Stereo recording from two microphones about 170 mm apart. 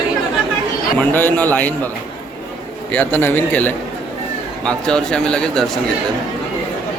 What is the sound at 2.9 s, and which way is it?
Speech, 10° left (ahead or behind).